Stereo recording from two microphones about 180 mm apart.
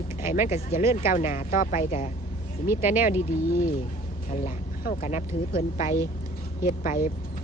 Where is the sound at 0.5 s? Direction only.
45° left (ahead or behind).